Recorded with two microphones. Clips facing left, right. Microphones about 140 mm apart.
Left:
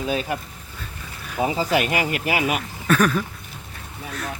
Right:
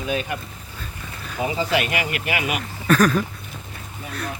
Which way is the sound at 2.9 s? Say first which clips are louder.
Right 2 dB; 5° left (ahead or behind).